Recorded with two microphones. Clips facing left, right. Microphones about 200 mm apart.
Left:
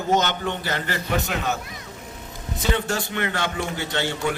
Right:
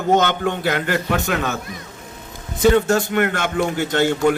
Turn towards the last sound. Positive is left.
turn(degrees=-50)  # may be behind; listen again after turning